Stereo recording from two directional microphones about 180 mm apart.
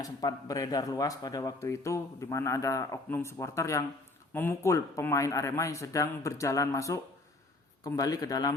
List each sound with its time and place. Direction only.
0.0 s a man's voice: 20° left (ahead or behind)